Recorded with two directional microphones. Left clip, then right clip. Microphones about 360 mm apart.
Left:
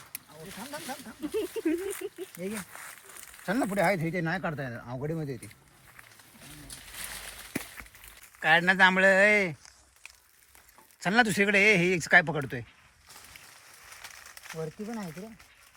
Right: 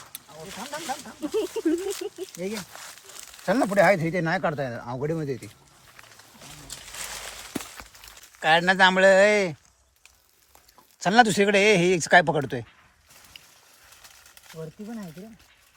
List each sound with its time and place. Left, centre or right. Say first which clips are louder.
0.0 s speech: right 4 dB; centre
2.6 s a sound: right 3 dB; centre
3.4 s speech: right 7 dB; centre
6.5 s a sound: right 5 dB; centre
11.0 s speech: right 6 dB; centre
14.5 s speech: left 1 dB; centre